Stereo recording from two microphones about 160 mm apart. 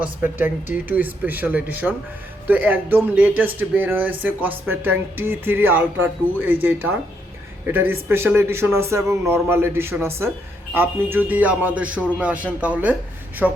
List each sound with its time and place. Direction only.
0.0 s a man's voice: 10° right (ahead or behind)